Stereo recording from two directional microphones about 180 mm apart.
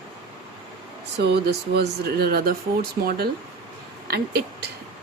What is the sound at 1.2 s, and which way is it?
Speech, 65° right (ahead or behind).